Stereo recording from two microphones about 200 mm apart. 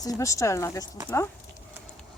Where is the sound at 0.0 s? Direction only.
15° left (ahead or behind).